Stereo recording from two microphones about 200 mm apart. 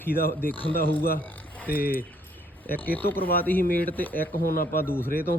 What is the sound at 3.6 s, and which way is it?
Speech, 45° left (ahead or behind).